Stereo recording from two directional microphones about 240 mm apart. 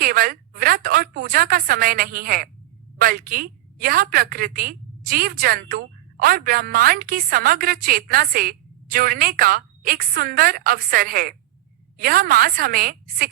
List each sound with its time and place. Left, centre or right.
0.0 s a woman's voice: right